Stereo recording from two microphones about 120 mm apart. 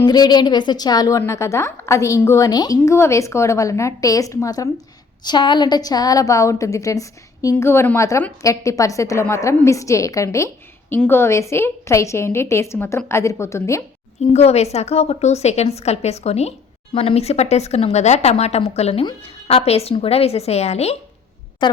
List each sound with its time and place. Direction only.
0.0 s a woman's voice: 35° left (ahead or behind)
5.2 s a woman's voice: 40° left (ahead or behind); by 13.8 s 25° left (ahead or behind)
14.3 s a woman's voice: 60° left (ahead or behind)
21.6 s a woman's voice: 40° left (ahead or behind)